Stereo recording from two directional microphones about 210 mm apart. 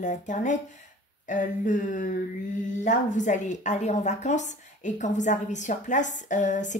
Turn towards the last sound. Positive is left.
turn(degrees=35)  # may be behind; listen again after turning